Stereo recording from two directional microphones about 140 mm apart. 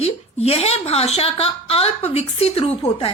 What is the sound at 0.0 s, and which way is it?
A woman's voice, 45° left (ahead or behind).